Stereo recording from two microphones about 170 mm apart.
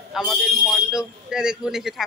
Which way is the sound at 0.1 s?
Centre (ahead or behind).